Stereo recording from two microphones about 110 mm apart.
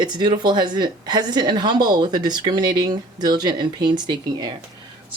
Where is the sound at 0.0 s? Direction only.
40° right (ahead or behind).